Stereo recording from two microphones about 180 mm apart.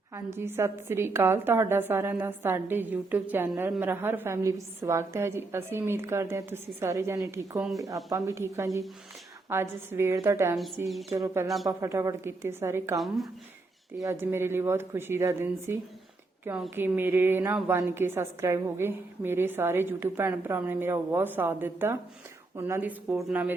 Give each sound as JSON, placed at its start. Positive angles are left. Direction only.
{"t": 0.3, "sound": "a woman's voice", "side_deg": -15}
{"t": 11.4, "sound": "speech", "side_deg": 0}
{"t": 11.8, "sound": "a woman's voice", "side_deg": -15}
{"t": 14.0, "sound": "a woman's voice", "side_deg": -15}